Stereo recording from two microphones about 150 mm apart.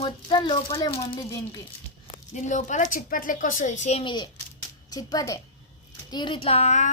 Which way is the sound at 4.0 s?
30° left (ahead or behind).